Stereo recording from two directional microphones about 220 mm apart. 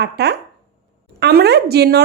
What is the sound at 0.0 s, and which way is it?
A woman's voice, 50° right (ahead or behind).